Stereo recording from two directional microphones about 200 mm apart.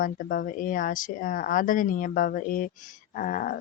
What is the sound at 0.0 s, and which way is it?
Speech, 40° left (ahead or behind).